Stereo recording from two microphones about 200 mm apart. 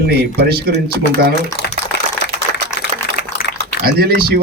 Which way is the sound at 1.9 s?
60° left (ahead or behind).